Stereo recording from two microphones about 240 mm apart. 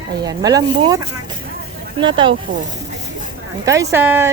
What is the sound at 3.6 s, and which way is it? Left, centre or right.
Speech, centre.